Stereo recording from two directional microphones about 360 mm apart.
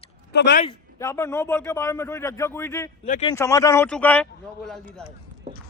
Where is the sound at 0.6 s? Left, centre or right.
Centre.